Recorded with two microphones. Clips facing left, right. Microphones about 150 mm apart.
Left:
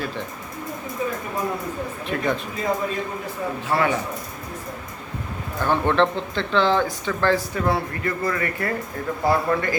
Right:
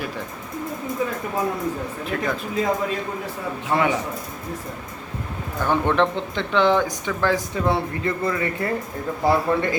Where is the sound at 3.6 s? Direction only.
15° right (ahead or behind).